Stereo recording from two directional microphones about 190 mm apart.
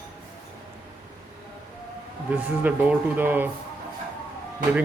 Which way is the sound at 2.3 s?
10° right (ahead or behind).